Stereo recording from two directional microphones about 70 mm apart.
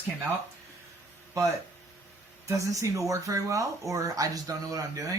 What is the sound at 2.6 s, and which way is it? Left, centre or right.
Speech, right.